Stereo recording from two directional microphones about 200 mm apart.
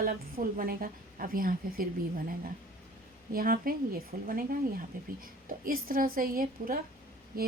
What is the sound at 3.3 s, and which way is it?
A woman's voice, 45° right (ahead or behind).